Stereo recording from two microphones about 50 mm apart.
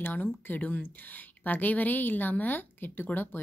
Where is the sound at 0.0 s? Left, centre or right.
Left.